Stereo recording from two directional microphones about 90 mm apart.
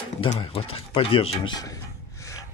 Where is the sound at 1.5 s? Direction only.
40° left (ahead or behind).